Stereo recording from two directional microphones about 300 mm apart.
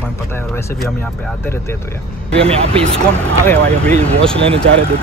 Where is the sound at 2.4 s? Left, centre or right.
Centre.